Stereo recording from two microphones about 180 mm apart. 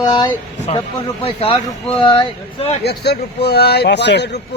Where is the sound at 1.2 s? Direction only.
30° left (ahead or behind).